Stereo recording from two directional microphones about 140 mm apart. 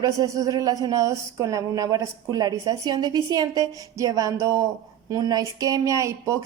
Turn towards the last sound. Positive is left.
turn(degrees=-20)  # may be behind; listen again after turning